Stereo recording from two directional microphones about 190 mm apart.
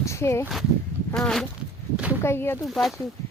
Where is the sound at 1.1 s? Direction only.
Centre (ahead or behind).